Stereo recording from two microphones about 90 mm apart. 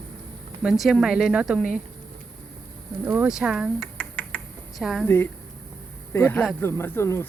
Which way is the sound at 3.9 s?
10° left (ahead or behind).